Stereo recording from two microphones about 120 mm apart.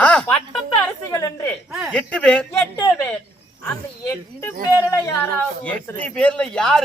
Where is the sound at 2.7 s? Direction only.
20° left (ahead or behind).